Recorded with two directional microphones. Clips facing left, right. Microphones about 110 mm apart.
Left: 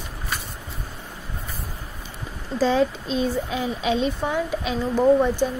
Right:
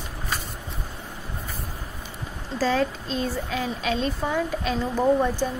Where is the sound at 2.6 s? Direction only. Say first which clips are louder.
Left 3 dB; 15° left (ahead or behind).